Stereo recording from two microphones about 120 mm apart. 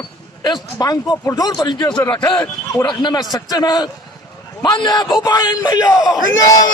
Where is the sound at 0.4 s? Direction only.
35° left (ahead or behind).